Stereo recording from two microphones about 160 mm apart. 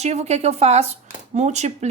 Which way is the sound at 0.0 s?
45° right (ahead or behind).